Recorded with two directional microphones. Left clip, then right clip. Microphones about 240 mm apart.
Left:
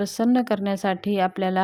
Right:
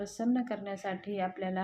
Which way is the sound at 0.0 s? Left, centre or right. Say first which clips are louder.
Left 11 dB; left.